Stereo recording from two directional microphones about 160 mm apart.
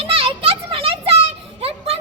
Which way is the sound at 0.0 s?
35° right (ahead or behind).